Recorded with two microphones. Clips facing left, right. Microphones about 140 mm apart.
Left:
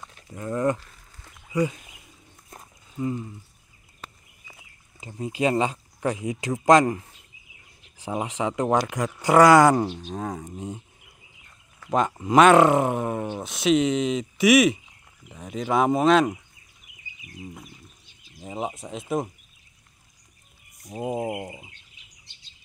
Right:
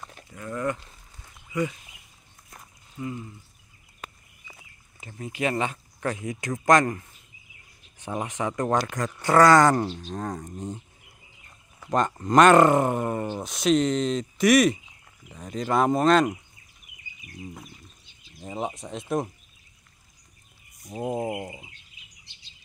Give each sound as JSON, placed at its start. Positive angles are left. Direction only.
{"t": 0.3, "sound": "speech", "side_deg": 25}
{"t": 2.5, "sound": "walk", "side_deg": 25}
{"t": 5.0, "sound": "speech", "side_deg": 25}
{"t": 6.2, "sound": "speech", "side_deg": 10}
{"t": 8.1, "sound": "speech", "side_deg": 10}
{"t": 11.9, "sound": "speech", "side_deg": 5}
{"t": 18.4, "sound": "speech", "side_deg": 5}
{"t": 20.9, "sound": "speech", "side_deg": 5}